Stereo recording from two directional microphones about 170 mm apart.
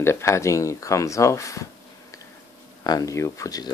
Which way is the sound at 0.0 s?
15° left (ahead or behind).